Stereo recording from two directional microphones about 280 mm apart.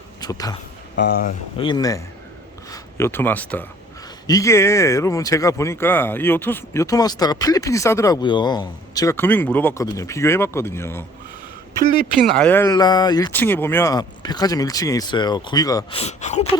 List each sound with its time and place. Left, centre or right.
0.2 s speech: centre
0.9 s speech: left
1.5 s speech: centre
12.2 s speech: centre; by 16.5 s left